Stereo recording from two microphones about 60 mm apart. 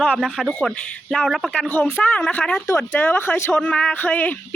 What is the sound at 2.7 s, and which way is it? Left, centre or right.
Speech, left.